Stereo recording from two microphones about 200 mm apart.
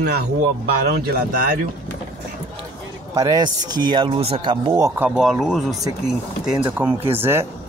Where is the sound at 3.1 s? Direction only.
20° right (ahead or behind); by 5.8 s centre (ahead or behind).